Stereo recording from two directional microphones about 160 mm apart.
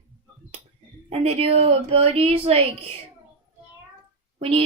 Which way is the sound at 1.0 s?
40° right (ahead or behind).